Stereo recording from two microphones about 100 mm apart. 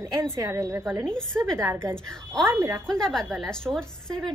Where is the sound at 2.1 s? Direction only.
5° left (ahead or behind).